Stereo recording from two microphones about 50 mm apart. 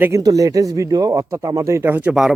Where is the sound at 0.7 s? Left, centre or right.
Right.